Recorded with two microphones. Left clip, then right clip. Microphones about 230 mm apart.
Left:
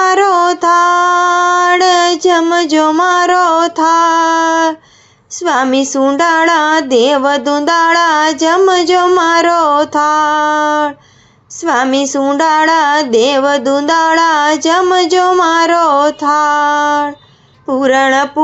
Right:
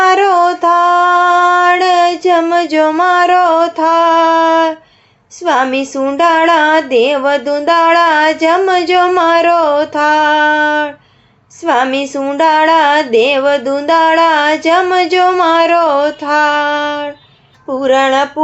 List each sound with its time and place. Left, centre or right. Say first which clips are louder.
0.0 s music: right 1 dB; left
5.4 s female singing: even; left